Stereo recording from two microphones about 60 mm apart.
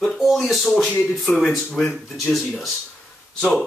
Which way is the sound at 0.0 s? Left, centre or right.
Centre.